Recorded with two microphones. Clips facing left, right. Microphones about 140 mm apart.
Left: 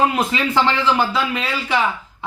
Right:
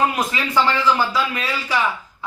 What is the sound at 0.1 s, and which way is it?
A man's voice, 25° left (ahead or behind).